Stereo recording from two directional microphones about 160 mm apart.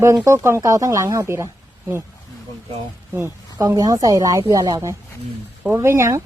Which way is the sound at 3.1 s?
15° right (ahead or behind).